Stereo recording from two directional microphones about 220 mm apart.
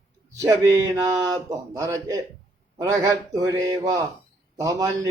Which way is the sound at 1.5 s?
15° right (ahead or behind).